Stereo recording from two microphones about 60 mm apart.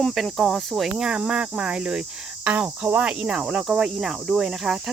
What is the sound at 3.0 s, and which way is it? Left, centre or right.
Cricket, centre.